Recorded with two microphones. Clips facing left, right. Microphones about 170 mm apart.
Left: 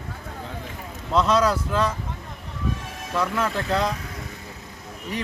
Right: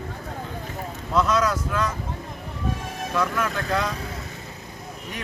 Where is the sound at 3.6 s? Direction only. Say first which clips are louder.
Left 3 dB; 30° left (ahead or behind).